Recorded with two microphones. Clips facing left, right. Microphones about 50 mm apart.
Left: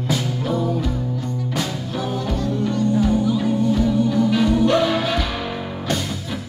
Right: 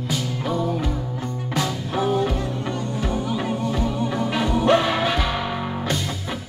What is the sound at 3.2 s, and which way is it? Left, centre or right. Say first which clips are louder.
Music: left 5 dB; right.